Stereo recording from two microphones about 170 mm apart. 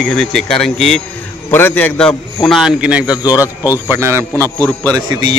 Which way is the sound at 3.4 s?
20° left (ahead or behind).